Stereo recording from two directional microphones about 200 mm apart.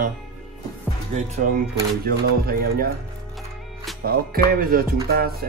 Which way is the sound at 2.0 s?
50° right (ahead or behind).